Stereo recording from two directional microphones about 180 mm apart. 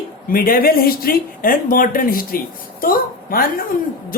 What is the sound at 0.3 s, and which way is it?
A woman's voice, 55° left (ahead or behind).